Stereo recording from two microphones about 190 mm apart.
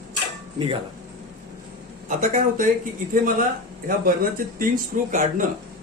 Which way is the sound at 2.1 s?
45° right (ahead or behind).